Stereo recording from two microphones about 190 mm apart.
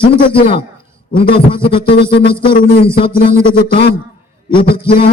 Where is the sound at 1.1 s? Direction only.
25° left (ahead or behind).